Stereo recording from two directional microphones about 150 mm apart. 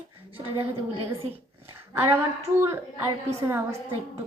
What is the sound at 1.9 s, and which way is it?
A woman's voice, 15° right (ahead or behind).